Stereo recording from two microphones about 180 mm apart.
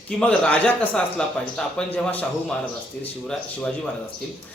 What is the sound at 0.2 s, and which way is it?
Speech, 5° left (ahead or behind).